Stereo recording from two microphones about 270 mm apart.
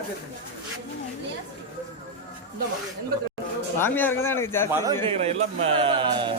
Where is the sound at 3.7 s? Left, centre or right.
Centre.